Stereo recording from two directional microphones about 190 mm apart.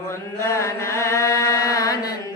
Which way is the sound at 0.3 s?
15° left (ahead or behind).